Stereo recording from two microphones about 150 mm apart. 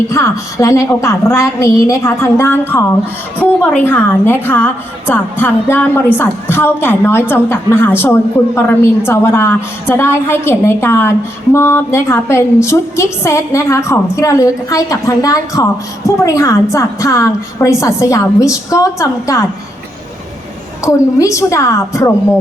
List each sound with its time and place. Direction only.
0.1 s a woman's voice: 20° left (ahead or behind)
3.8 s a woman's voice: 15° left (ahead or behind)
20.8 s a woman's voice: 20° left (ahead or behind)